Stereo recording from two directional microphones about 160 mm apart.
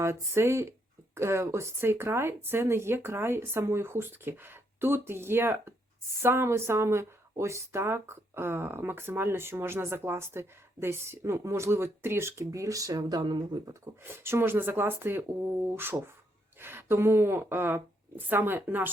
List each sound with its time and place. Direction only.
0.0 s speech: 15° right (ahead or behind)
14.0 s speech: 15° right (ahead or behind)